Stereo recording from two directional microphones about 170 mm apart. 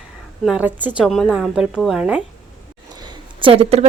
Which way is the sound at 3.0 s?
30° right (ahead or behind).